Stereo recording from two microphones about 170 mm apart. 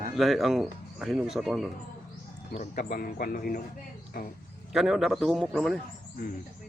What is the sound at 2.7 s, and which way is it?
Speech, 55° left (ahead or behind).